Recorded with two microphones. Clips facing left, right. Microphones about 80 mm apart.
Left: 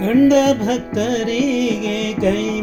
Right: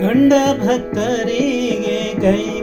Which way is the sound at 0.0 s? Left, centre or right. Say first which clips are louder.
Even; right.